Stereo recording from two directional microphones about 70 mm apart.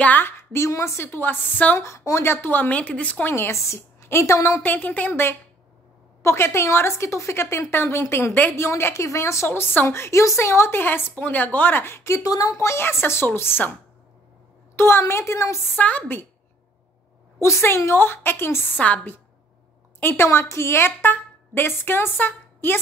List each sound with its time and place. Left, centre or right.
0.0 s speech: left
0.4 s a woman's voice: left
1.8 s a woman's voice: left
2.4 s speech: left
3.3 s a woman's voice: left
4.6 s speech: left
6.2 s a woman's voice: left
9.5 s a woman's voice: left
12.2 s a woman's voice: left
14.8 s a woman's voice: left
15.7 s speech: left
17.4 s a woman's voice: left
20.0 s a woman's voice: left